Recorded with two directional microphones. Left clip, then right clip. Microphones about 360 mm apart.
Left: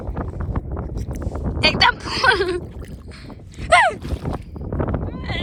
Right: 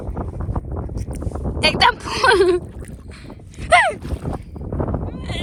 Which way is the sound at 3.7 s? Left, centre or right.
Centre.